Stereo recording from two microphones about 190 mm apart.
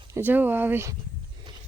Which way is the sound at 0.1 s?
10° right (ahead or behind).